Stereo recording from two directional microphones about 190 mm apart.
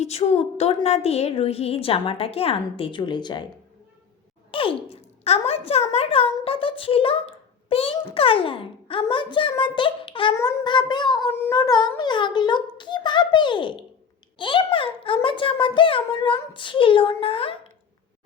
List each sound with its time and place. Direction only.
0.0 s a woman's voice: 35° left (ahead or behind)
4.5 s a child's voice: 30° left (ahead or behind)